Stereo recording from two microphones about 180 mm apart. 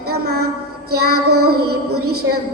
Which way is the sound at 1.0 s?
60° right (ahead or behind).